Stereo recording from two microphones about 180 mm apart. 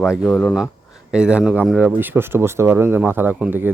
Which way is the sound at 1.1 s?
5° right (ahead or behind).